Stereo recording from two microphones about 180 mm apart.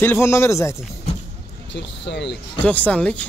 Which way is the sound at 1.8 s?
75° left (ahead or behind).